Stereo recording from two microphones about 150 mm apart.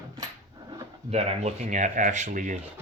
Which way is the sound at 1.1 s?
45° right (ahead or behind).